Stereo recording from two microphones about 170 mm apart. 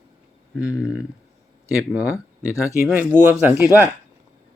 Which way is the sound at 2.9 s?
10° right (ahead or behind).